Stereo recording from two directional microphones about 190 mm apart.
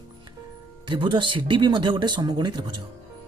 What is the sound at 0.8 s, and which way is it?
Speech, 25° right (ahead or behind).